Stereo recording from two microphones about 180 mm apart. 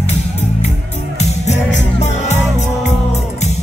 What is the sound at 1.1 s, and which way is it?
Music, 40° left (ahead or behind).